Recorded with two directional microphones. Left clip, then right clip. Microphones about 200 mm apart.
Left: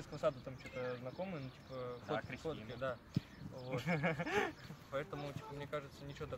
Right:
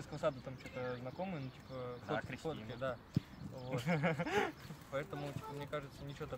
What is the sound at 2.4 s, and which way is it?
Speech, 10° left (ahead or behind).